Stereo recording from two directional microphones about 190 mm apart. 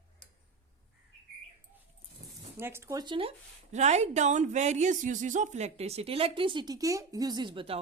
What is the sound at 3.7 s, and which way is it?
Speech, 35° right (ahead or behind).